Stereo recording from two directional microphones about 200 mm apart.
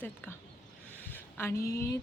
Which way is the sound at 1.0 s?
10° left (ahead or behind).